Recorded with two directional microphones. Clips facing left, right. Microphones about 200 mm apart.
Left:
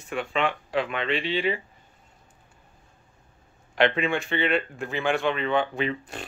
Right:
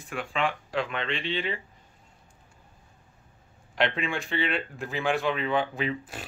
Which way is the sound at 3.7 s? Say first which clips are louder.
Left 5 dB; centre (ahead or behind).